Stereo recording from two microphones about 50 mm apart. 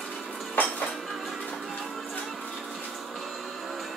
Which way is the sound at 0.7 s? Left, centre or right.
Centre.